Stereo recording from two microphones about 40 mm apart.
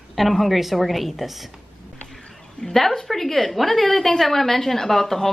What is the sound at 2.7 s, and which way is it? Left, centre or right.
A woman's voice, centre.